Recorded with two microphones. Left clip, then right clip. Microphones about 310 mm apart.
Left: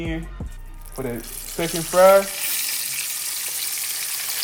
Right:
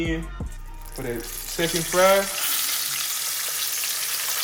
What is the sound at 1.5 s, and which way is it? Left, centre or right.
Frying, centre.